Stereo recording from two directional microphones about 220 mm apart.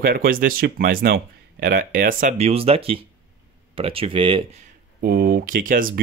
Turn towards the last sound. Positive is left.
turn(degrees=-40)  # may be behind; listen again after turning